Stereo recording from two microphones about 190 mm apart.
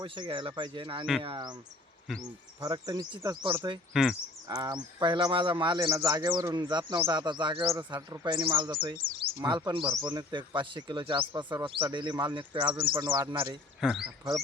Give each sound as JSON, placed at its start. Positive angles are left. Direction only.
{"t": 0.0, "sound": "a man's voice", "side_deg": -25}
{"t": 3.9, "sound": "speech", "side_deg": 0}
{"t": 4.4, "sound": "a man's voice", "side_deg": -20}
{"t": 13.8, "sound": "speech", "side_deg": 0}